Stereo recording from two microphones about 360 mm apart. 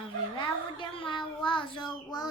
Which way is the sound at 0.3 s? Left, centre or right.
Centre.